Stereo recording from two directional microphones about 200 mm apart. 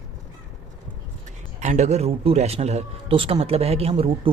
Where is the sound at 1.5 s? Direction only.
35° right (ahead or behind).